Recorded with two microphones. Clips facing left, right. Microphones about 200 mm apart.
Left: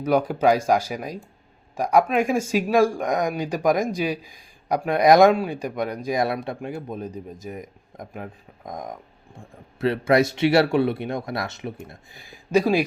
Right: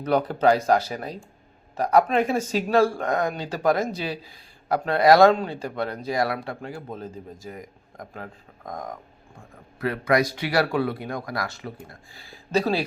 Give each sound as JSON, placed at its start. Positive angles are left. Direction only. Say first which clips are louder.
{"t": 0.0, "sound": "speech", "louder": "left 1 dB", "side_deg": 10}